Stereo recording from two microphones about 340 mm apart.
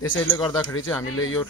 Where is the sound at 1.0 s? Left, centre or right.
Left.